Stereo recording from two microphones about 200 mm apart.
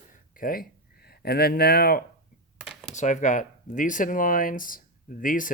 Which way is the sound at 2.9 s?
35° left (ahead or behind).